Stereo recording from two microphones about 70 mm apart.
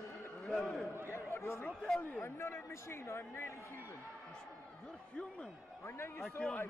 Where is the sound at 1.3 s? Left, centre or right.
Left.